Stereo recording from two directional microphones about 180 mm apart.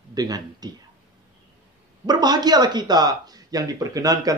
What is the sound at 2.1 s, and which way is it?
Speech, 25° right (ahead or behind).